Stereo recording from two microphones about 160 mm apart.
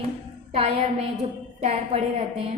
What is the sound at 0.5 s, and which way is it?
A woman's voice, 40° right (ahead or behind).